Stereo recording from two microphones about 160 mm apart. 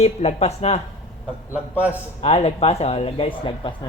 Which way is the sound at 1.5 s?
10° right (ahead or behind).